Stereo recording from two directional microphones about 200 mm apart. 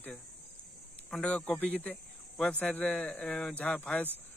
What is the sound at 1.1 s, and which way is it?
A man's voice, 5° left (ahead or behind).